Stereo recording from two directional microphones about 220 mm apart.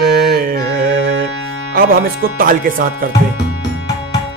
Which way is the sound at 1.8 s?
40° right (ahead or behind).